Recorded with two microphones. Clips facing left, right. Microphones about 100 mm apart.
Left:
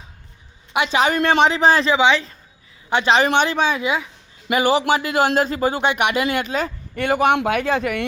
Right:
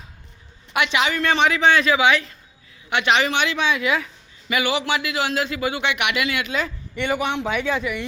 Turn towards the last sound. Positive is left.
turn(degrees=55)  # may be behind; listen again after turning